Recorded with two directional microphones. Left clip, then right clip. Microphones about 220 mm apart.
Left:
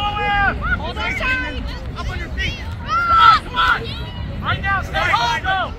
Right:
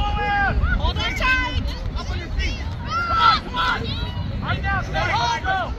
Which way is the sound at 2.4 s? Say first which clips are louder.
Left 6 dB; 10° right (ahead or behind).